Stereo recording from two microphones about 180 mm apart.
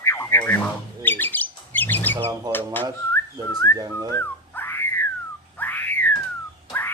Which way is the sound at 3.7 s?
20° right (ahead or behind).